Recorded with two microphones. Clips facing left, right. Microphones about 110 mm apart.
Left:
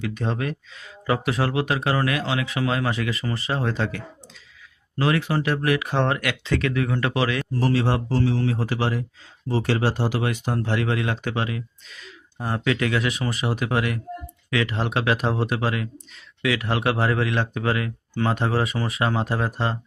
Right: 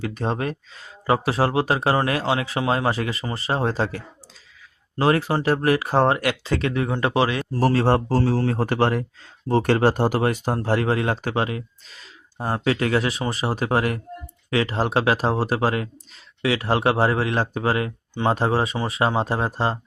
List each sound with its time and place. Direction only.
0.0 s speech: 35° right (ahead or behind)
7.6 s speech: 45° right (ahead or behind)